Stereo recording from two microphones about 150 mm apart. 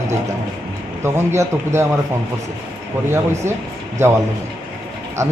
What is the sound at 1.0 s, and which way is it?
Speech, 15° right (ahead or behind).